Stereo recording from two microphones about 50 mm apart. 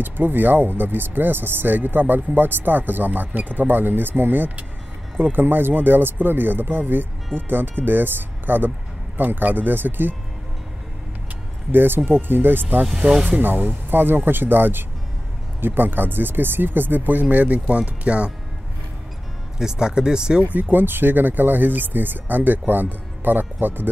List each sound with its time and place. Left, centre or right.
0.0 s speech: right
11.7 s speech: right
19.6 s speech: centre
20.5 s speech: right